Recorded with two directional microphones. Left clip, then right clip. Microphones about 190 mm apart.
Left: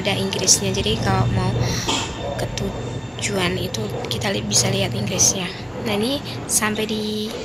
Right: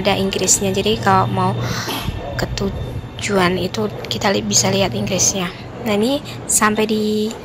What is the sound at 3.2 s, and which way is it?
A woman's voice, 15° right (ahead or behind).